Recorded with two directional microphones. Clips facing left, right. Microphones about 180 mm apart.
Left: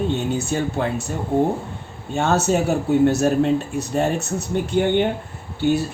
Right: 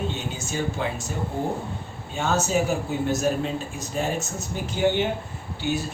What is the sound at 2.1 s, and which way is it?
A man's voice, 65° left (ahead or behind).